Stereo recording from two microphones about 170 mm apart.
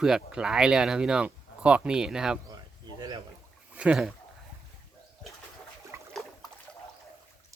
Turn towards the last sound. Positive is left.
turn(degrees=-15)  # may be behind; listen again after turning